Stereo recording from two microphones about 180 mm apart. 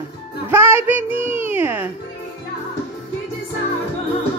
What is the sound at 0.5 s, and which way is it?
A woman's voice, 15° right (ahead or behind).